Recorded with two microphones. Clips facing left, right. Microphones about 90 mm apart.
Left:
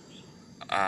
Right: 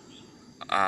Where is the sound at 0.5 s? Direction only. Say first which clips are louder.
Right 2 dB; centre (ahead or behind).